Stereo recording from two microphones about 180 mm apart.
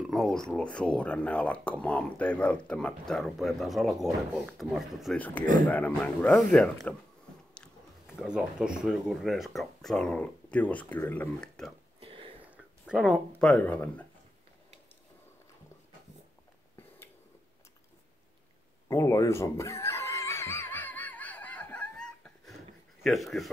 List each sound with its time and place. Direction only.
0.0 s speech: centre (ahead or behind)
8.2 s speech: 5° right (ahead or behind)
12.0 s a sound: 30° right (ahead or behind)
12.4 s a sound: 5° right (ahead or behind)
13.4 s speech: 5° left (ahead or behind)
18.9 s dog: 15° left (ahead or behind)
23.0 s speech: centre (ahead or behind)